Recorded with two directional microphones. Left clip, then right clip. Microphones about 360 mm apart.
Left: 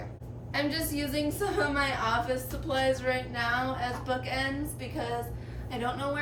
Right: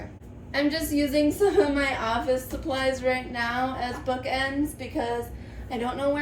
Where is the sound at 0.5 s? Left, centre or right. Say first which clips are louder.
Right 5 dB; centre.